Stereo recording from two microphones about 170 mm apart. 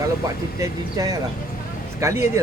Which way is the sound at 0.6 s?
20° right (ahead or behind).